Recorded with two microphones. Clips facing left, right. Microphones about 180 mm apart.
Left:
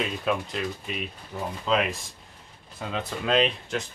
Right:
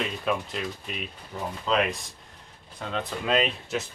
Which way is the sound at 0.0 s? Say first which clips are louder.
Left 1 dB; centre (ahead or behind).